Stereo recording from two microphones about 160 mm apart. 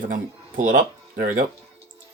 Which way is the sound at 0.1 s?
50° right (ahead or behind).